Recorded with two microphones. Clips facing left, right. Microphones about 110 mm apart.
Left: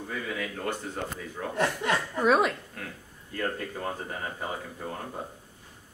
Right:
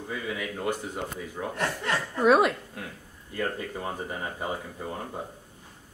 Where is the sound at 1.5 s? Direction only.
15° left (ahead or behind).